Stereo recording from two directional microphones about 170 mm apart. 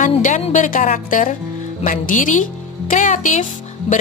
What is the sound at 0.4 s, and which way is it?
A woman's voice, 45° left (ahead or behind).